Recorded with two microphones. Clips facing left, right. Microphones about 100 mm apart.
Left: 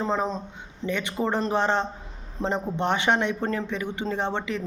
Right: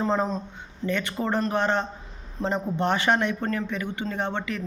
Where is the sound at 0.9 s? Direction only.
15° left (ahead or behind).